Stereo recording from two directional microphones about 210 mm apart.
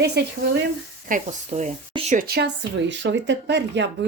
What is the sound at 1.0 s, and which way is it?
Speech, 35° right (ahead or behind).